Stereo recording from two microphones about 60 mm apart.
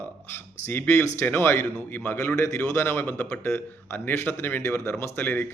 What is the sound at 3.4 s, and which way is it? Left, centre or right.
A man's voice, left.